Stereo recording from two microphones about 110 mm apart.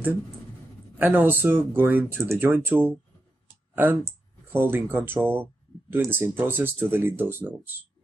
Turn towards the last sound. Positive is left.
turn(degrees=-20)  # may be behind; listen again after turning